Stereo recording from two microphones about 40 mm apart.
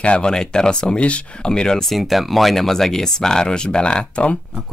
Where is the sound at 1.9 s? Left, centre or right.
Centre; by 4.3 s left.